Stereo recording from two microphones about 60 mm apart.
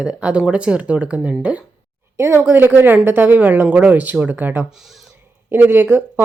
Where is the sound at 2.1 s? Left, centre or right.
Right.